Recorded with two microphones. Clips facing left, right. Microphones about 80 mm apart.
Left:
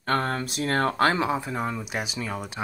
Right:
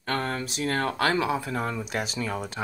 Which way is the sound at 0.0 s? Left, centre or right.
Left.